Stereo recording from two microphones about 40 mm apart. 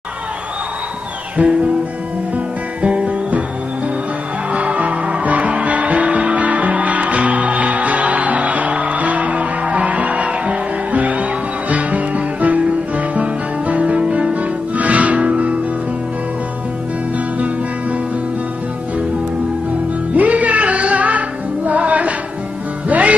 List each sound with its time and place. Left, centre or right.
1.4 s music: right
2.3 s music: right
4.5 s music: right
13.9 s music: right
14.4 s music: right
20.2 s music: right